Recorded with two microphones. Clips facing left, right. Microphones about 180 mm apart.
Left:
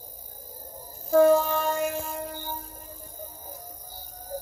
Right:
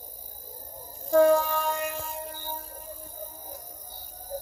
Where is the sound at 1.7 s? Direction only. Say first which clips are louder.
Left 4 dB; centre (ahead or behind).